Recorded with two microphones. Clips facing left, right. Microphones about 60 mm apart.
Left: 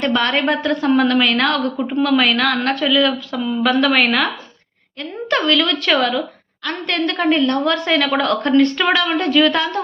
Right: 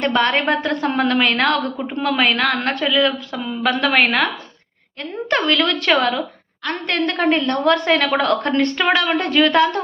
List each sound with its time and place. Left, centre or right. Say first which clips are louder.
0.0 s a woman's voice: even; right
5.3 s a woman's voice: left 1 dB; right
8.8 s a woman's voice: even; right
9.2 s a woman's voice: right 2 dB; right